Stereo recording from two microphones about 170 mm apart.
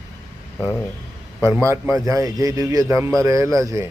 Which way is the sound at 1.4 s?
15° right (ahead or behind).